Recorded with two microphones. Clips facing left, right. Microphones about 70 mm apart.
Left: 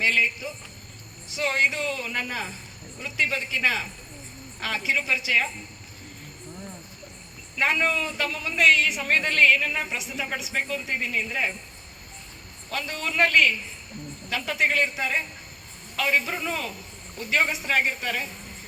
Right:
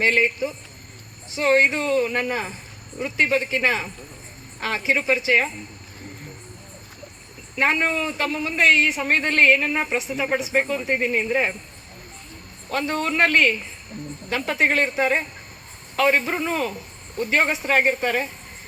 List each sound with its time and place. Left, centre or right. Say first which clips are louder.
0.0 s a man's voice: right 4 dB; right
1.3 s a man's voice: right 6 dB; right
7.5 s a man's voice: right 3 dB; right
12.7 s a man's voice: right 5 dB; right